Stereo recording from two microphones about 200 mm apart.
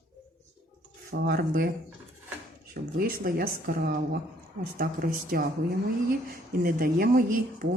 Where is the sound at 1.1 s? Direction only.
50° right (ahead or behind).